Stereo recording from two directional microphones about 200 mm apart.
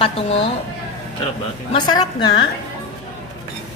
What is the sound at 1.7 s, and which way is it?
Speech, 20° left (ahead or behind).